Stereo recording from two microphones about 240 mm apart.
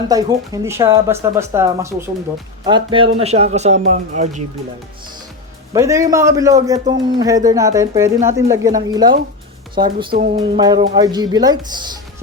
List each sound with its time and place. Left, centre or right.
0.1 s speech: centre; by 4.4 s right
5.7 s speech: centre